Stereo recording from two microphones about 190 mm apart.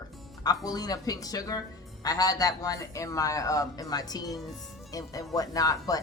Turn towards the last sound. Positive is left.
turn(degrees=20)  # may be behind; listen again after turning